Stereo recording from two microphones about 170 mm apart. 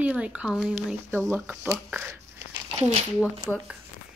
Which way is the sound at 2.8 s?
40° right (ahead or behind).